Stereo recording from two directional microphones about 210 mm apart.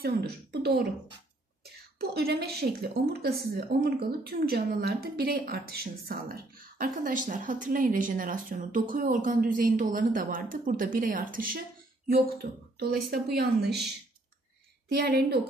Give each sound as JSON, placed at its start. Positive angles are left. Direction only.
{"t": 0.0, "sound": "a woman's voice", "side_deg": -45}
{"t": 14.9, "sound": "a woman's voice", "side_deg": -50}